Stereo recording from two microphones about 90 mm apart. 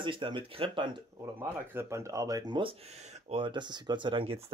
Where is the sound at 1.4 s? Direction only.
30° right (ahead or behind).